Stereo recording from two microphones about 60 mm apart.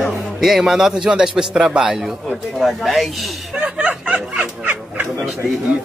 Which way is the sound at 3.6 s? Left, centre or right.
Right.